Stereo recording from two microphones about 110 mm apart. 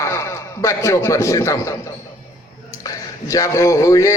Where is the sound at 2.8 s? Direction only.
30° left (ahead or behind).